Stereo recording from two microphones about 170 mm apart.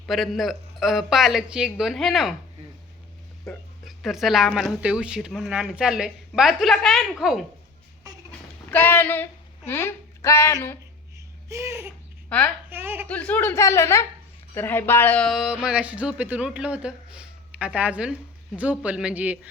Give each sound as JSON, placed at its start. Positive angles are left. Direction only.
{"t": 0.0, "sound": "speech", "side_deg": 0}
{"t": 3.8, "sound": "speech", "side_deg": 0}
{"t": 8.3, "sound": "a sound", "side_deg": 5}
{"t": 8.7, "sound": "speech", "side_deg": 10}
{"t": 11.4, "sound": "speech", "side_deg": -15}
{"t": 13.1, "sound": "speech", "side_deg": 10}